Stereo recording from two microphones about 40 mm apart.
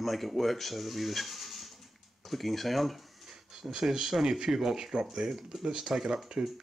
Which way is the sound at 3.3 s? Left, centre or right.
Centre.